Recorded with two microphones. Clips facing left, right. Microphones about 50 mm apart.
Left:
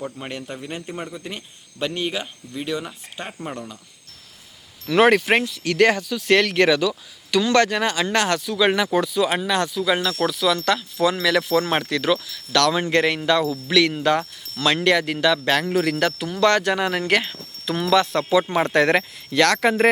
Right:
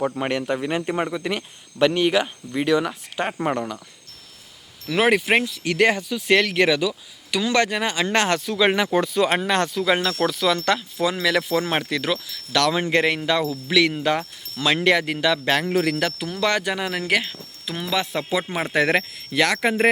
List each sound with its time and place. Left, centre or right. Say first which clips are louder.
0.2 s a man's voice: right 8 dB; right
1.1 s speech: right 7 dB; right
2.2 s speech: right 6 dB; right
3.2 s speech: right 8 dB; right
4.9 s speech: left 3 dB; centre
5.6 s speech: left 4 dB; centre
9.0 s speech: right 1 dB; right
9.8 s speech: even; centre
12.5 s speech: left 1 dB; centre
16.7 s speech: left 2 dB; centre